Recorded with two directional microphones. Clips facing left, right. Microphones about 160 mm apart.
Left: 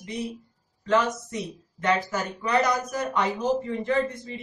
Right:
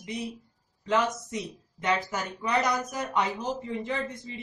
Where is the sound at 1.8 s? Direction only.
15° right (ahead or behind).